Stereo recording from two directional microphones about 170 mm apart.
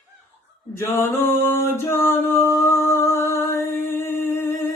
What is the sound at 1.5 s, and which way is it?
Singing, 15° left (ahead or behind).